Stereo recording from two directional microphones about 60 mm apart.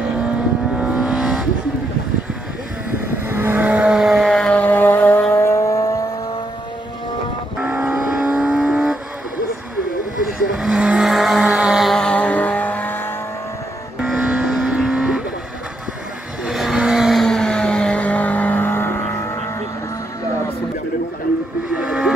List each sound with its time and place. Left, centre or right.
0.7 s vehicle: centre
3.3 s vehicle: right
3.6 s vehicle: right
3.9 s vehicle: centre
4.3 s a sound: centre
4.6 s vehicle: left
5.4 s vehicle: left
7.5 s vehicle: centre
10.5 s vehicle: centre
12.0 s vehicle: centre
14.2 s vehicle: centre
16.4 s vehicle: centre
17.2 s vehicle: centre; by 19.3 s left